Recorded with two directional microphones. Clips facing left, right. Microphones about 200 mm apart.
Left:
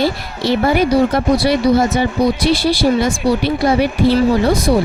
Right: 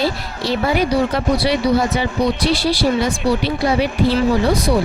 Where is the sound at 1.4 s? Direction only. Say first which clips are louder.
Left 3 dB; 45° left (ahead or behind).